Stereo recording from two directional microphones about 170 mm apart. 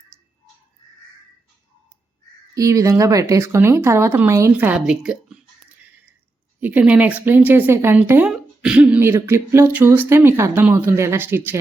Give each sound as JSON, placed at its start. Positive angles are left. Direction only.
{"t": 2.6, "sound": "speech", "side_deg": -20}